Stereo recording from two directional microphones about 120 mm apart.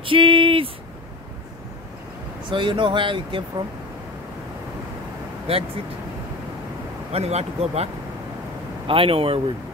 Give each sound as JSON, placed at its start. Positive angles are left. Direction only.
{"t": 0.0, "sound": "speech", "side_deg": -45}
{"t": 2.5, "sound": "speech", "side_deg": -45}
{"t": 5.5, "sound": "speech", "side_deg": -55}
{"t": 7.1, "sound": "speech", "side_deg": -60}
{"t": 8.8, "sound": "speech", "side_deg": -50}